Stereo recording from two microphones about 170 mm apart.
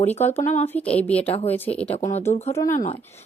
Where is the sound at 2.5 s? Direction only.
20° left (ahead or behind).